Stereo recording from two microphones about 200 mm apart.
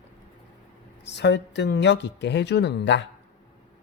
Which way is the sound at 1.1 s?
60° left (ahead or behind).